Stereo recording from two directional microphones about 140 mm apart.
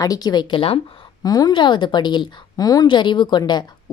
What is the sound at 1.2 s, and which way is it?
A woman's voice, 25° left (ahead or behind).